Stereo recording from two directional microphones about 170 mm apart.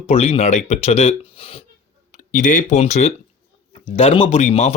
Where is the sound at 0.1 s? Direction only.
35° left (ahead or behind).